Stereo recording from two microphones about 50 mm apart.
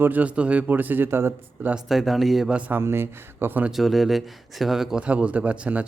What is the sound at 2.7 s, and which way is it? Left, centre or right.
Speech, right.